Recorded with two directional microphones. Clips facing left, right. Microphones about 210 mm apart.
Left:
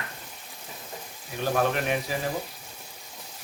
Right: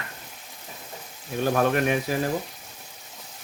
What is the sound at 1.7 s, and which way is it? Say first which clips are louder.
Speech: right 4 dB; 55° right (ahead or behind).